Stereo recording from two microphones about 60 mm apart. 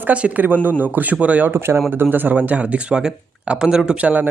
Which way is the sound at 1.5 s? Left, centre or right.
Right.